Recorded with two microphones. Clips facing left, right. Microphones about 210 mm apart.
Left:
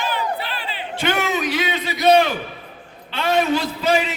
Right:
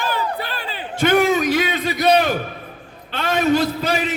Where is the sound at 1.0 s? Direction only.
45° right (ahead or behind).